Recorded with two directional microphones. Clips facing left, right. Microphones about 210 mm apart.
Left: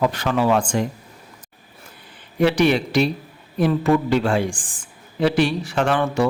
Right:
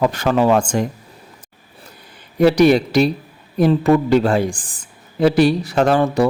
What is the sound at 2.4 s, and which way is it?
A woman's voice, 40° right (ahead or behind).